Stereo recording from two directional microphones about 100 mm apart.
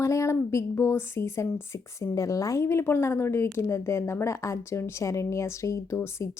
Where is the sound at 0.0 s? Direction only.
30° left (ahead or behind).